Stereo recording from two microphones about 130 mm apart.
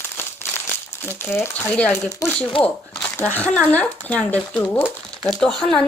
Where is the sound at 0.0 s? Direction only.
15° left (ahead or behind).